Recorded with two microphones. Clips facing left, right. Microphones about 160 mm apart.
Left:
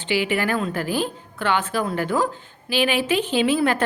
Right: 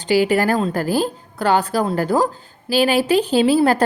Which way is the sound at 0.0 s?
40° right (ahead or behind).